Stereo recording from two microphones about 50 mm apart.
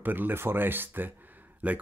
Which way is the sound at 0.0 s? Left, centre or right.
Right.